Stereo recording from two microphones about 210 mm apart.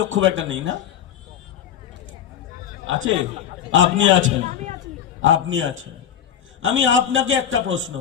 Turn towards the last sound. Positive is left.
turn(degrees=-65)  # may be behind; listen again after turning